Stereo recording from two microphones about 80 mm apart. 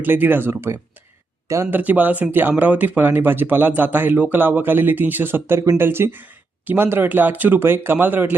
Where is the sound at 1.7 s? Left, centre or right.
Right.